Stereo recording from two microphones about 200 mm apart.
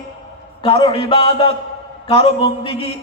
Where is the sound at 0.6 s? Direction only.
25° left (ahead or behind).